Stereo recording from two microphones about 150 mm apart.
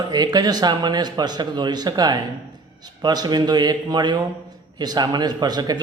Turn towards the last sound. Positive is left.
turn(degrees=-25)  # may be behind; listen again after turning